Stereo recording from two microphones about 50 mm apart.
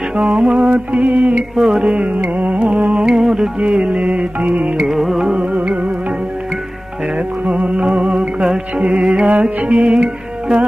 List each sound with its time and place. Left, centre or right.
0.3 s music: right
0.7 s music: right
1.5 s music: centre
1.9 s music: right
3.1 s music: centre
3.6 s music: right
4.9 s music: centre
7.4 s music: right